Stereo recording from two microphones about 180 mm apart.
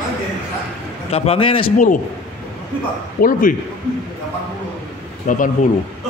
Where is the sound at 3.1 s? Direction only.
50° left (ahead or behind).